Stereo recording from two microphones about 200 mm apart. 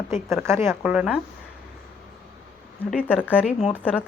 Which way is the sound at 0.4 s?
15° right (ahead or behind).